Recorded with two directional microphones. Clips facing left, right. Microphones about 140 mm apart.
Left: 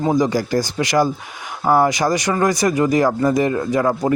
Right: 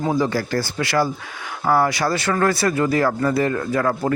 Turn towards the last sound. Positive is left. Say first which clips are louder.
# left 3 dB
turn(degrees=15)  # may be behind; listen again after turning